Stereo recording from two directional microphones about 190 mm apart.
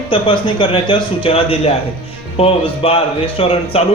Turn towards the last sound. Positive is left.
turn(degrees=30)  # may be behind; listen again after turning